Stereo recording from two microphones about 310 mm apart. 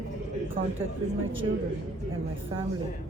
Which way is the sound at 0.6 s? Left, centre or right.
Right.